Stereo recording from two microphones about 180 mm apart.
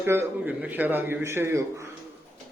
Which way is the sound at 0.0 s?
15° right (ahead or behind).